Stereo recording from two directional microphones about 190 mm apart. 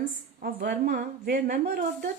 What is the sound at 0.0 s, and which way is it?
A woman's voice, 50° right (ahead or behind).